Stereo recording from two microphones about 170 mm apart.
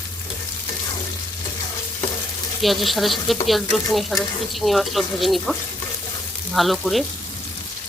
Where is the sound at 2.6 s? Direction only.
Centre (ahead or behind).